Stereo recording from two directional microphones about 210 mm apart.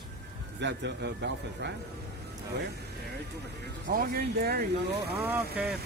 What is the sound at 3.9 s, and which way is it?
Speech, 45° right (ahead or behind).